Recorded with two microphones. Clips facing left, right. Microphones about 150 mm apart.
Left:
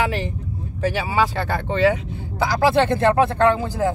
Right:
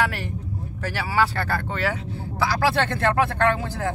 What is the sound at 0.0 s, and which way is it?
Speech, 20° left (ahead or behind).